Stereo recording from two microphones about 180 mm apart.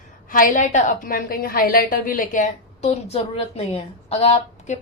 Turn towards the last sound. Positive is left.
turn(degrees=35)  # may be behind; listen again after turning